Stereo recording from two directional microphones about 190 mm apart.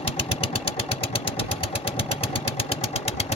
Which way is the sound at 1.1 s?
30° left (ahead or behind).